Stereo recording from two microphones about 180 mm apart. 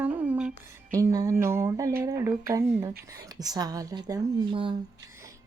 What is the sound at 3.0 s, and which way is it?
Speech, 20° right (ahead or behind).